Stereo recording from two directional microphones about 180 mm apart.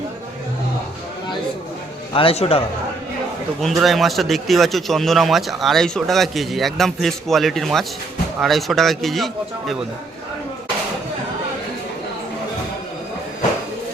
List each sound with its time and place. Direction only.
2.1 s a man's voice: 30° left (ahead or behind)
3.6 s a man's voice: centre (ahead or behind)